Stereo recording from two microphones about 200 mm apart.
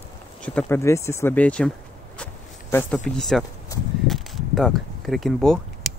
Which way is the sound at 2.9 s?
Centre (ahead or behind).